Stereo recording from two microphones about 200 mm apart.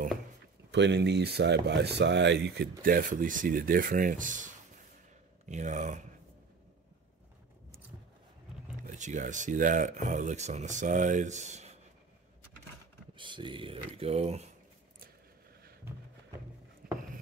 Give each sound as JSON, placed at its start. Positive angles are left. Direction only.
{"t": 0.7, "sound": "speech", "side_deg": -60}
{"t": 2.8, "sound": "speech", "side_deg": -45}
{"t": 5.5, "sound": "speech", "side_deg": -35}
{"t": 8.8, "sound": "speech", "side_deg": -40}
{"t": 13.2, "sound": "speech", "side_deg": -25}